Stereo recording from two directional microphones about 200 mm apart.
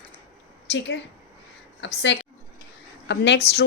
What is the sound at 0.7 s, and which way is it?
Speech, 65° left (ahead or behind).